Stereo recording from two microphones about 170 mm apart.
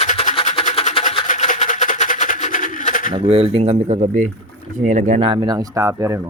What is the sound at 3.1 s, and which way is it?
Speech, 35° right (ahead or behind).